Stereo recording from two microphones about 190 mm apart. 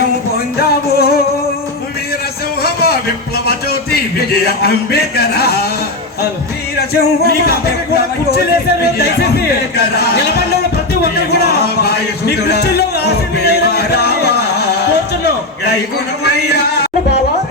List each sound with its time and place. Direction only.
0.9 s music: 55° left (ahead or behind)
2.6 s a man's voice: 55° left (ahead or behind)
6.7 s music: 55° left (ahead or behind)
8.8 s music: 55° left (ahead or behind)